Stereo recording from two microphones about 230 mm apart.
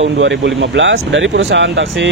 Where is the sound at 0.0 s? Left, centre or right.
Right.